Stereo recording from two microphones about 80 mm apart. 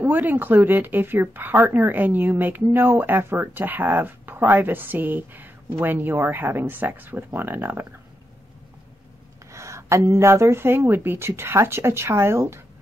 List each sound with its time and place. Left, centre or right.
0.0 s speech: right
9.5 s speech: right